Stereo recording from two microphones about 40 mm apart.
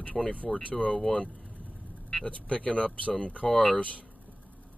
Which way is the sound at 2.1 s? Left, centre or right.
Left.